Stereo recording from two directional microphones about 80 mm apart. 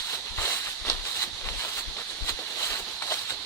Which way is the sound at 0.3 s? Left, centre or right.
Left.